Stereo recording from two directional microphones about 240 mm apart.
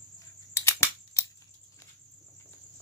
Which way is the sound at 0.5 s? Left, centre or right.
Centre.